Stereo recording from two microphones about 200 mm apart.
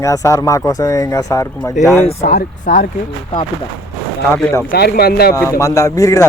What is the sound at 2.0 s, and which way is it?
Speech, 35° left (ahead or behind).